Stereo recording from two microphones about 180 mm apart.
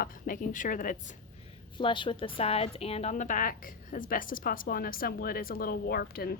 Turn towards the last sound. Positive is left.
turn(degrees=60)  # may be behind; listen again after turning